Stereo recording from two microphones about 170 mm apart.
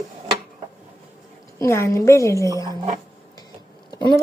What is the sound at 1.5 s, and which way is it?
Speech, 15° left (ahead or behind).